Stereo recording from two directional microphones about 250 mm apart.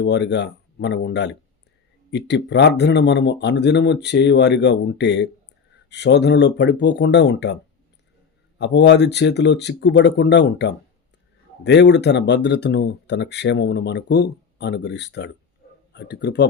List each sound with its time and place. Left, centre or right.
0.0 s speech: left
8.5 s speech: left